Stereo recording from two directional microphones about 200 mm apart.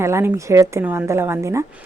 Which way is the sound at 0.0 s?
15° right (ahead or behind).